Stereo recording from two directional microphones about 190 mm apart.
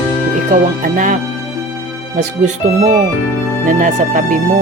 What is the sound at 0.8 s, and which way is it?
Speech, 45° right (ahead or behind).